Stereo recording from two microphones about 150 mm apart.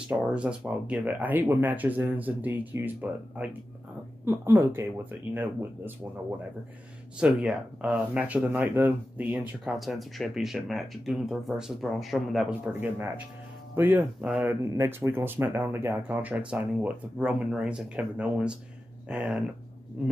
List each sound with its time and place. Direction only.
0.1 s speech: 5° right (ahead or behind)
7.2 s speech: 5° right (ahead or behind)